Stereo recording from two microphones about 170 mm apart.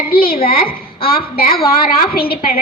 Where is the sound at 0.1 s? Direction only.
60° left (ahead or behind).